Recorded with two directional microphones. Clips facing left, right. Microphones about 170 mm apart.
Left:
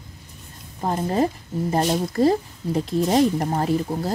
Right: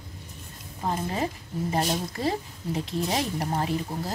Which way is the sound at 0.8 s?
40° left (ahead or behind).